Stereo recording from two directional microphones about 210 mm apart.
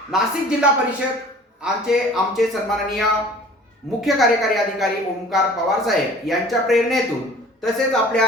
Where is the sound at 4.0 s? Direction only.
Centre (ahead or behind).